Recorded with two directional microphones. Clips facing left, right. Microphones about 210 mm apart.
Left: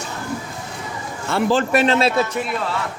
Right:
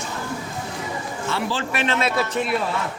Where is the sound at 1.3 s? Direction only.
45° left (ahead or behind).